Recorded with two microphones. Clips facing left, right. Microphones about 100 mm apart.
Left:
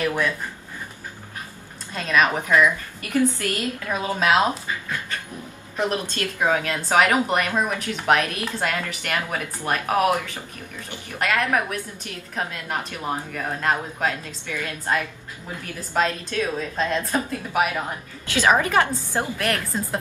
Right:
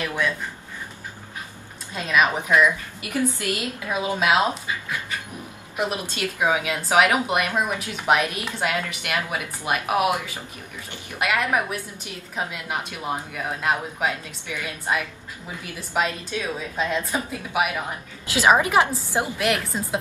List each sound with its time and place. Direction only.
2.0 s a woman's voice: 10° right (ahead or behind)
5.8 s a woman's voice: 10° right (ahead or behind)
18.2 s a woman's voice: 15° right (ahead or behind)